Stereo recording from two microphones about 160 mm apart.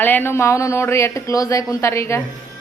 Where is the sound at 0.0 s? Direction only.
10° left (ahead or behind).